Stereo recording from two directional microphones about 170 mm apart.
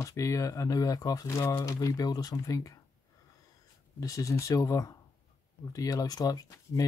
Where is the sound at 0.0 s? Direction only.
20° left (ahead or behind).